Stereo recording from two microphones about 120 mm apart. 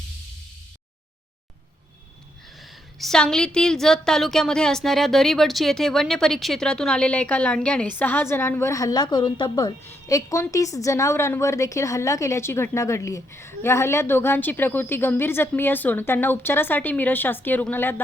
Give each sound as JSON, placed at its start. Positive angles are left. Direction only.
{"t": 2.6, "sound": "a woman's voice", "side_deg": 0}
{"t": 9.8, "sound": "a woman's voice", "side_deg": 25}